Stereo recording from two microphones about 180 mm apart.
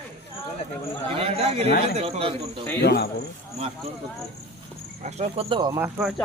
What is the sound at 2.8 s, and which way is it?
Speech, 60° left (ahead or behind).